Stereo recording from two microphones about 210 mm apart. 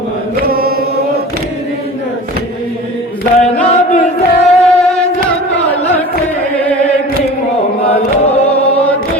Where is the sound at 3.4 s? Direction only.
30° left (ahead or behind).